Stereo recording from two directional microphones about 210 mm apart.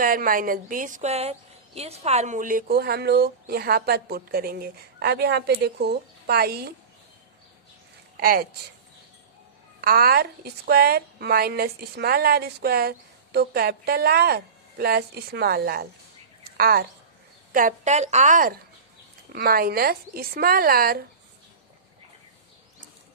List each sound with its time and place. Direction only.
0.0 s a woman's voice: 40° right (ahead or behind)
8.2 s a woman's voice: 45° right (ahead or behind)
9.8 s a woman's voice: 45° right (ahead or behind)